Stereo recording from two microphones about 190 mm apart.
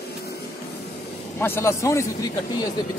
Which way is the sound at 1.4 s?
10° left (ahead or behind).